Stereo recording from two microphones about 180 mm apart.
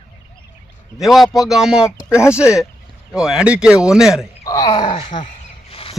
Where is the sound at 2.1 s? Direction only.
15° left (ahead or behind).